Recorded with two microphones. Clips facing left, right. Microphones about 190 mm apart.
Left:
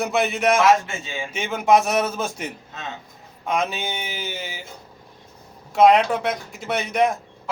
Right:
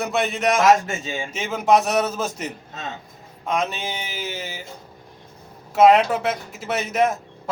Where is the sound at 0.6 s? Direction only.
40° right (ahead or behind).